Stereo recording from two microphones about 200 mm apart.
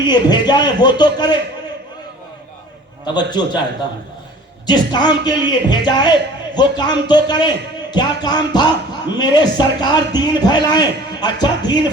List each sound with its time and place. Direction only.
0.0 s a man's voice: 20° left (ahead or behind)
3.2 s a man's voice: 20° left (ahead or behind)
4.6 s a man's voice: 20° left (ahead or behind)